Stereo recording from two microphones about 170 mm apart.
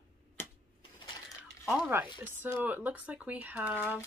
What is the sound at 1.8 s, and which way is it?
Speech, 10° right (ahead or behind).